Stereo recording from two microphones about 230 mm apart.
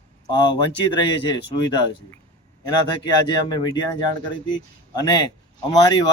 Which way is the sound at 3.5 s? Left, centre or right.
Centre.